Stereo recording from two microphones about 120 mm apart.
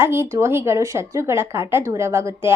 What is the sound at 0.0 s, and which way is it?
A woman's voice, 20° right (ahead or behind).